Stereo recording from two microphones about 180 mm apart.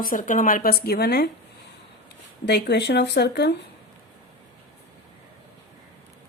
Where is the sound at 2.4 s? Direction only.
65° left (ahead or behind).